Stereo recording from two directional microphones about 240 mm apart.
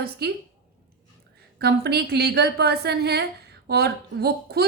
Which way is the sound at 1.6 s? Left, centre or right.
Right.